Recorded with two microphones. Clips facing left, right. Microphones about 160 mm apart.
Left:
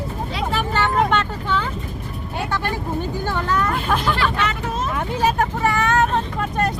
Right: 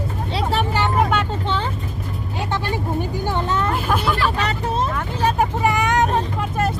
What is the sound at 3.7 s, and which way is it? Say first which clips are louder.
Vehicle: even; 5° right (ahead or behind).